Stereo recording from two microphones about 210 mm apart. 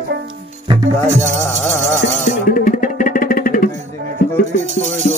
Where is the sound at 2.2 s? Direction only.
40° left (ahead or behind).